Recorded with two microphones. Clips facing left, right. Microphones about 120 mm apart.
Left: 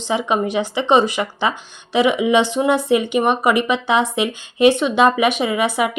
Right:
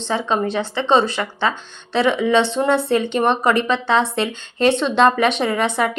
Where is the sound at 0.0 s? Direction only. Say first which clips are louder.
Left 1 dB; 15° left (ahead or behind).